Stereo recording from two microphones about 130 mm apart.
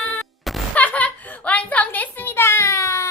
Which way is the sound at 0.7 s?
10° left (ahead or behind).